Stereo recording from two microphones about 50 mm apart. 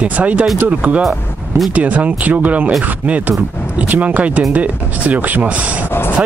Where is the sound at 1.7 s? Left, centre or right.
Right.